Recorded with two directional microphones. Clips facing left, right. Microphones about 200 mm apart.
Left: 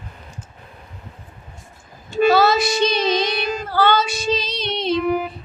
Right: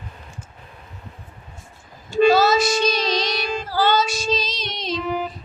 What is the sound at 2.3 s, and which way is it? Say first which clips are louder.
Female singing: left 1 dB; 60° left (ahead or behind).